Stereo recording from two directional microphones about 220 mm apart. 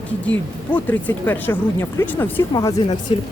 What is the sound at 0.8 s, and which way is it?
Speech, 10° left (ahead or behind).